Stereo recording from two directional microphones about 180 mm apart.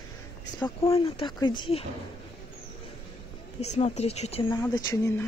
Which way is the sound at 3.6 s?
35° left (ahead or behind).